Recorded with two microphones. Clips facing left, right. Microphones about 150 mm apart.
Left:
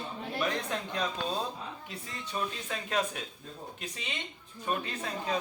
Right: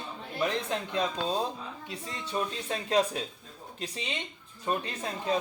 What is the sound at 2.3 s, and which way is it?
Speech, 35° right (ahead or behind).